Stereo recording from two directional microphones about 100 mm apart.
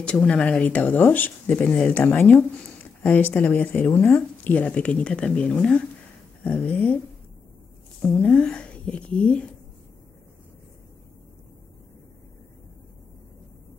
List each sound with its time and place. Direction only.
0.0 s speech: 10° left (ahead or behind)
8.0 s speech: 10° left (ahead or behind)